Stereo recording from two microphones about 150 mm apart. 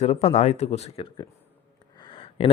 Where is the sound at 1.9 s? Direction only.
35° left (ahead or behind).